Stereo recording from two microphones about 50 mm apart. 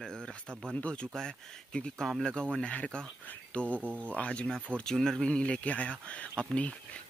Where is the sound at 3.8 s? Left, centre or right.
Right.